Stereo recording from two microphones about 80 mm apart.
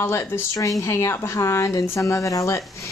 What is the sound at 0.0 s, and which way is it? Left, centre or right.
Speech, left.